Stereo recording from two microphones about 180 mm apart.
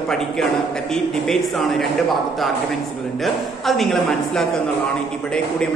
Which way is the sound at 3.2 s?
Centre (ahead or behind).